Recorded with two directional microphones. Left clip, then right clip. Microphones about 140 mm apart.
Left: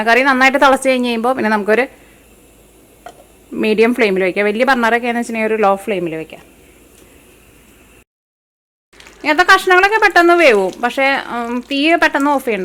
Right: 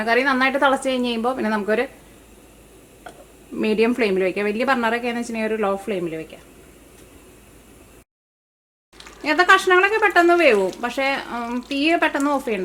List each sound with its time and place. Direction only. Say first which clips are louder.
0.0 s a woman's voice: left 7 dB; 25° left (ahead or behind)
3.5 s a woman's voice: left 6 dB; 20° left (ahead or behind)
9.2 s a woman's voice: left 5 dB; 25° left (ahead or behind)